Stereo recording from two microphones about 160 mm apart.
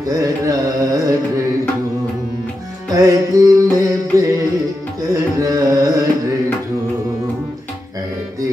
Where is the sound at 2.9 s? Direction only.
20° right (ahead or behind).